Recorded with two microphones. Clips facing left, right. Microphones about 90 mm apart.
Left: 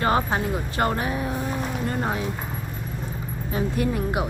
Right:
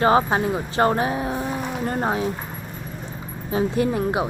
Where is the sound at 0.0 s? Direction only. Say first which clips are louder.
Right 4 dB; 20° right (ahead or behind).